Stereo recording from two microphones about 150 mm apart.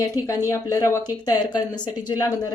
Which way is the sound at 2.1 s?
25° left (ahead or behind).